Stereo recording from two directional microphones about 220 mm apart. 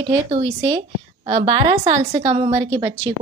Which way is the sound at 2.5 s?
15° right (ahead or behind).